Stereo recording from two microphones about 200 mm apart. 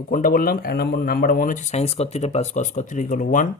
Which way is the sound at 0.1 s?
45° left (ahead or behind).